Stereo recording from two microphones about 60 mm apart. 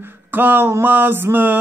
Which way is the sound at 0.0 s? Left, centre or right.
Right.